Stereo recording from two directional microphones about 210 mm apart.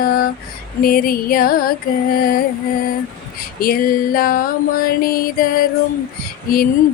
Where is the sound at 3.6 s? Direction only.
45° left (ahead or behind).